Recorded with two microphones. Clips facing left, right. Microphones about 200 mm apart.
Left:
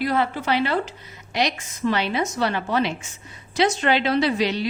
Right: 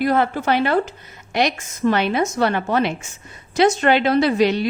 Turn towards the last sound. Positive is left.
turn(degrees=-50)  # may be behind; listen again after turning